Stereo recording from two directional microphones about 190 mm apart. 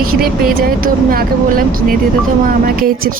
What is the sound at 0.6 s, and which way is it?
Speech, 50° right (ahead or behind).